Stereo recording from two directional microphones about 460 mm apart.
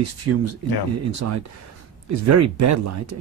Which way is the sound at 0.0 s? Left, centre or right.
Right.